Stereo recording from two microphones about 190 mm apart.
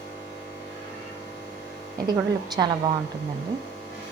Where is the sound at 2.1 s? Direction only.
20° right (ahead or behind).